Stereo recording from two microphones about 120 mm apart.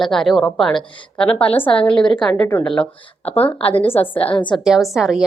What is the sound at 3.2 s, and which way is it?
A woman's voice, 55° left (ahead or behind).